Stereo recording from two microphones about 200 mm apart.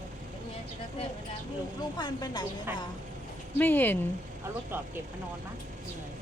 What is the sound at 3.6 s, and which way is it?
Speech, 10° left (ahead or behind).